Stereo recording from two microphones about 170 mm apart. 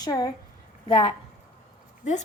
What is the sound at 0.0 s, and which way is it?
Speech, 20° left (ahead or behind).